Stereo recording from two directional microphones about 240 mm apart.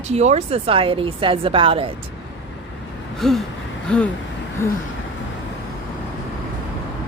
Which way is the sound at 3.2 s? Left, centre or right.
Centre.